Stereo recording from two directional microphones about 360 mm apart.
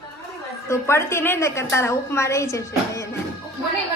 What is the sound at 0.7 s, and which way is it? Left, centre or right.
A woman's voice, centre.